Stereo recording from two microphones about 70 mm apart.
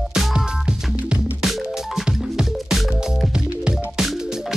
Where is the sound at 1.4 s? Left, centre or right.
Centre.